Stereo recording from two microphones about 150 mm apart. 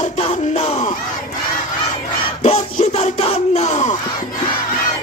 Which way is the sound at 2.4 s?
50° left (ahead or behind).